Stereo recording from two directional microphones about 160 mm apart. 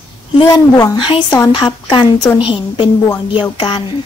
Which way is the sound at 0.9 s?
30° left (ahead or behind).